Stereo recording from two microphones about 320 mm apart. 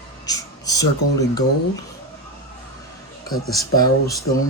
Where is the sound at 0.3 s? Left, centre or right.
Centre.